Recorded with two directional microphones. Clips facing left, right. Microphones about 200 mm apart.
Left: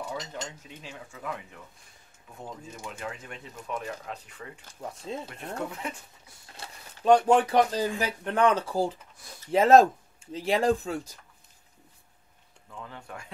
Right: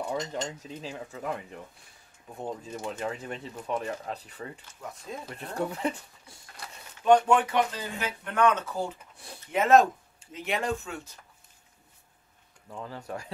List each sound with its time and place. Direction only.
0.1 s speech: 30° right (ahead or behind)
4.8 s speech: 30° left (ahead or behind)
5.3 s speech: 35° right (ahead or behind)
6.5 s speech: 30° left (ahead or behind)
12.6 s speech: 40° right (ahead or behind)